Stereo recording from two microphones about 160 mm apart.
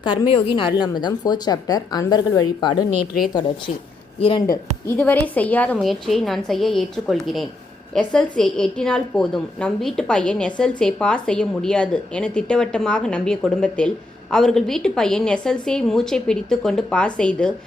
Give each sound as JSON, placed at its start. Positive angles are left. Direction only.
{"t": 0.0, "sound": "a woman's voice", "side_deg": 30}
{"t": 4.2, "sound": "speech", "side_deg": 30}
{"t": 4.9, "sound": "a woman's voice", "side_deg": 15}